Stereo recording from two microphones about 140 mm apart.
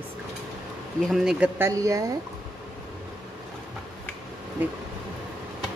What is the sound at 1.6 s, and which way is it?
Speech, 25° right (ahead or behind).